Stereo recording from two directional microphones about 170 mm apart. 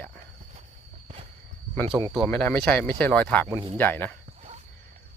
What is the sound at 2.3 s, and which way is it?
Speech, 10° left (ahead or behind).